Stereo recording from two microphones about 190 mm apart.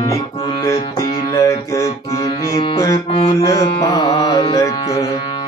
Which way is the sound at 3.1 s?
30° left (ahead or behind).